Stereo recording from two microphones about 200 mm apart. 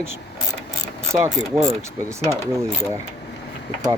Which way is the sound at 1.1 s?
15° right (ahead or behind).